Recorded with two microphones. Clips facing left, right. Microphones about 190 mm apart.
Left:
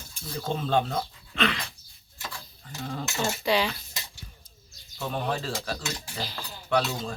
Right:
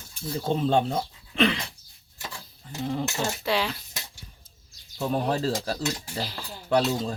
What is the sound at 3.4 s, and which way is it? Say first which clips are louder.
Speech: left 2 dB; centre (ahead or behind).